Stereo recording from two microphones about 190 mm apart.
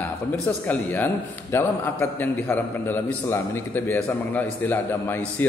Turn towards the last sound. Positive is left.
turn(degrees=10)  # may be behind; listen again after turning